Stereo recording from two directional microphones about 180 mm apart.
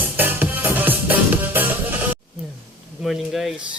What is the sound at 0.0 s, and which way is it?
Music, 10° right (ahead or behind).